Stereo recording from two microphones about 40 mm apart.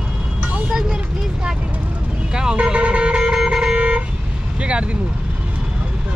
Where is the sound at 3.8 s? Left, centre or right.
Right.